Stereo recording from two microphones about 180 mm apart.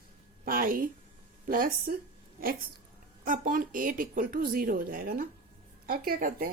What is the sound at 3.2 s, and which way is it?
Speech, 50° right (ahead or behind).